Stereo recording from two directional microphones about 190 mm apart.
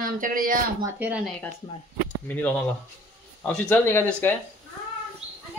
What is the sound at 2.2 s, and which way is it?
Speech, 10° left (ahead or behind).